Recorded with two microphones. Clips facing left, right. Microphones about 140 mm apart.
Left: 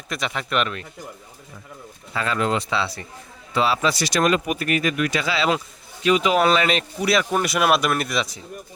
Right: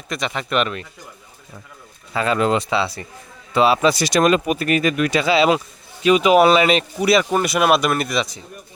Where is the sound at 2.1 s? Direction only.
20° right (ahead or behind).